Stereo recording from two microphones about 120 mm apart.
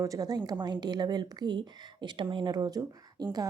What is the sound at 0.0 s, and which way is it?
A woman's voice, 30° right (ahead or behind).